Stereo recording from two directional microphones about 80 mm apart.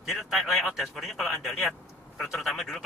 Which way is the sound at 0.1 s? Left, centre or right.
Centre.